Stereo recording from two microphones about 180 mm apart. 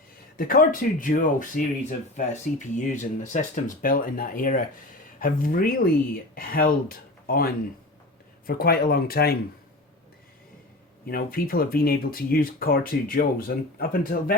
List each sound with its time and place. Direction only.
0.3 s speech: 50° left (ahead or behind)
11.0 s speech: 55° left (ahead or behind)